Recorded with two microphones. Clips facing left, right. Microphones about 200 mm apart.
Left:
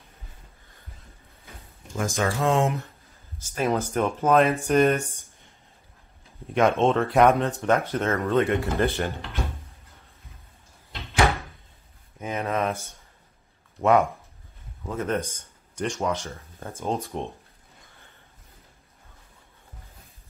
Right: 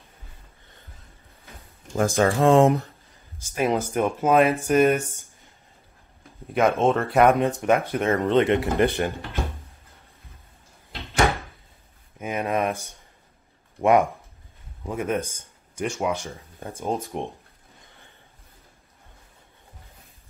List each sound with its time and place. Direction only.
2.0 s speech: 35° right (ahead or behind)
3.3 s speech: 15° right (ahead or behind)
6.5 s speech: 5° right (ahead or behind)
11.0 s door: 15° right (ahead or behind)
12.2 s a sound: 15° right (ahead or behind)
13.7 s speech: 15° right (ahead or behind)